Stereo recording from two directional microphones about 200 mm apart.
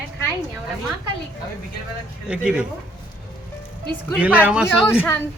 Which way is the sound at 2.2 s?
5° right (ahead or behind).